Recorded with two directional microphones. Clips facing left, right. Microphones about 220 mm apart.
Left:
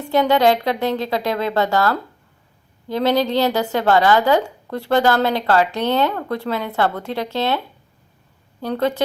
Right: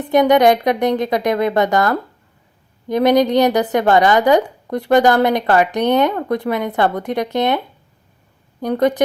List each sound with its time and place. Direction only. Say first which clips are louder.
0.0 s a woman's voice: right 4 dB; 15° right (ahead or behind)
8.6 s a woman's voice: right 4 dB; 15° right (ahead or behind)